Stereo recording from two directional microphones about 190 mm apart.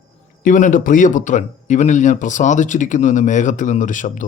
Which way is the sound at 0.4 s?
40° left (ahead or behind).